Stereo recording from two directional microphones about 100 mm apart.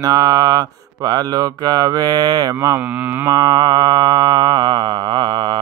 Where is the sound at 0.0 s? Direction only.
40° right (ahead or behind).